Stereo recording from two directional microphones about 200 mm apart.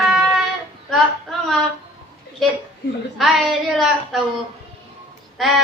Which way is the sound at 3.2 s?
Centre (ahead or behind).